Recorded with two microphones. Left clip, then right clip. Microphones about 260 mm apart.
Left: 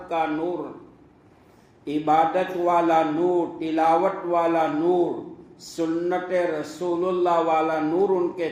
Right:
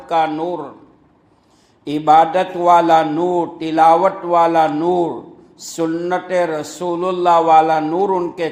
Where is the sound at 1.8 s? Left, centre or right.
Right.